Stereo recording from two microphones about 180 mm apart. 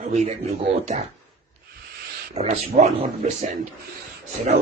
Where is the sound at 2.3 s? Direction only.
40° right (ahead or behind).